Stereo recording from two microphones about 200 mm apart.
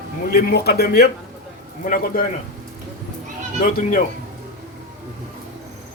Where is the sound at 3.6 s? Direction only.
45° left (ahead or behind).